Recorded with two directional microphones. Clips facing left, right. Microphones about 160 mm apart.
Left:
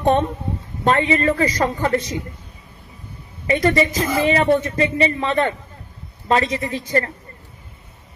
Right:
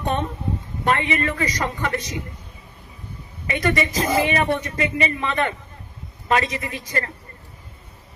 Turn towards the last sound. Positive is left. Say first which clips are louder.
# left 6 dB
turn(degrees=30)  # may be behind; listen again after turning